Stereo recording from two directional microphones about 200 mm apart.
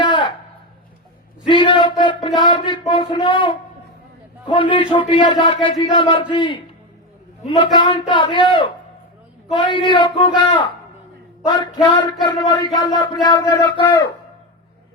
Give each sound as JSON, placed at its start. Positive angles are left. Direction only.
{"t": 0.0, "sound": "a sound", "side_deg": 25}
{"t": 1.5, "sound": "speech", "side_deg": 25}
{"t": 11.4, "sound": "speech", "side_deg": 25}